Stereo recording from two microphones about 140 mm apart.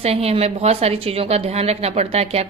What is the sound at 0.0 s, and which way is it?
A woman's voice, 45° right (ahead or behind).